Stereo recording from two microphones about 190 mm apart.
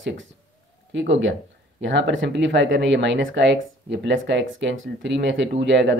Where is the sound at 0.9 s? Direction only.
75° right (ahead or behind).